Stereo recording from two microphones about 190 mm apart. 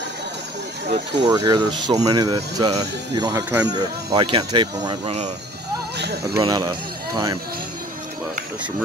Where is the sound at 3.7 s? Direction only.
25° right (ahead or behind).